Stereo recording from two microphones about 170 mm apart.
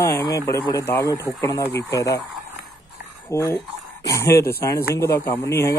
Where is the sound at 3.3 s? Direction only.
15° left (ahead or behind).